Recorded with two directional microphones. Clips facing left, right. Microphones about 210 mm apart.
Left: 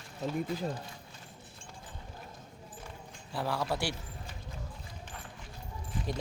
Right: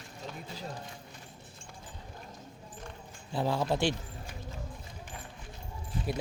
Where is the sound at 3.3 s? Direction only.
20° right (ahead or behind).